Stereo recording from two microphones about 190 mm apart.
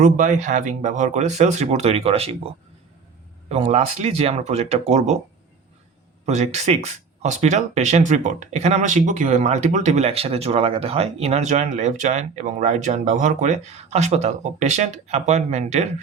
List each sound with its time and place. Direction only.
0.0 s speech: 40° right (ahead or behind)
3.5 s speech: 35° right (ahead or behind)
6.2 s speech: 35° right (ahead or behind)